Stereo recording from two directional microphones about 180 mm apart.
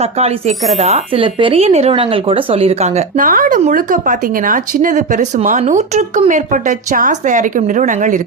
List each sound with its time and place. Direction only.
0.0 s speech: 35° right (ahead or behind)